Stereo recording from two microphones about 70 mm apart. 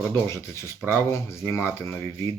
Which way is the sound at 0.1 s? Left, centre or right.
Left.